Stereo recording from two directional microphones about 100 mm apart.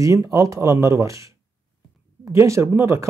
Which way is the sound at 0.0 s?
35° right (ahead or behind).